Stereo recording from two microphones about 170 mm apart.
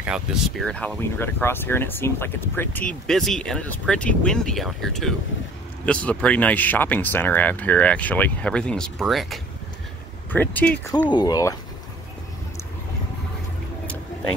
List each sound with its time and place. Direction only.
0.0 s speech: 5° right (ahead or behind)
10.3 s speech: 10° left (ahead or behind)
11.1 s speech: 25° left (ahead or behind)